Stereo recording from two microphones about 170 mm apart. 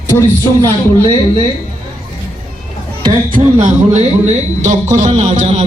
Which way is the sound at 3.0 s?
30° right (ahead or behind).